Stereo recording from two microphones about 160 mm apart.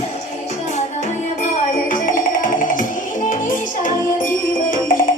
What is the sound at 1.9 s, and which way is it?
Music, 55° left (ahead or behind).